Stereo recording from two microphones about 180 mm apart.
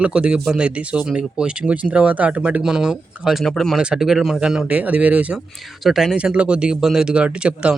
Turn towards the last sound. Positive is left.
turn(degrees=-5)  # may be behind; listen again after turning